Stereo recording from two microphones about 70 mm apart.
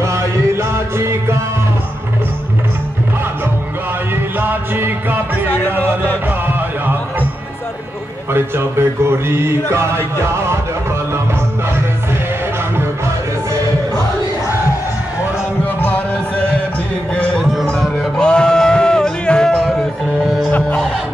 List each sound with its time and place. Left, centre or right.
0.0 s music: right
4.4 s music: right
5.5 s music: left
6.4 s music: right
8.3 s speech: right
17.1 s a sound: centre
17.9 s music: centre
19.6 s music: centre